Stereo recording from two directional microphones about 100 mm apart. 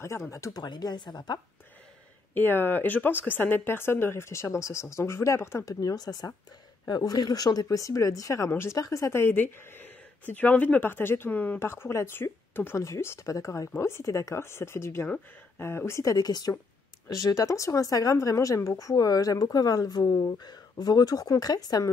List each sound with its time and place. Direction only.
0.3 s a woman's voice: 30° left (ahead or behind)
0.6 s speech: 45° left (ahead or behind)
2.3 s a woman's voice: 20° left (ahead or behind); by 21.9 s 40° left (ahead or behind)